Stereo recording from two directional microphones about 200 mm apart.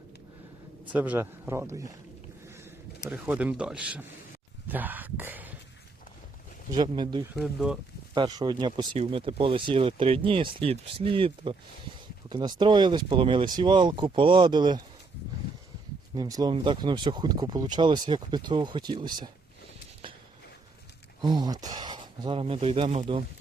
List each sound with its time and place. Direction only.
0.9 s speech: 10° right (ahead or behind)
2.5 s a sound: 15° right (ahead or behind)
3.1 s speech: 5° right (ahead or behind)
4.7 s a sound: 10° right (ahead or behind)
6.7 s speech: 20° right (ahead or behind)
7.3 s speech: centre (ahead or behind)
8.1 s speech: 20° right (ahead or behind)
16.1 s speech: 20° right (ahead or behind)
21.2 s speech: 20° right (ahead or behind)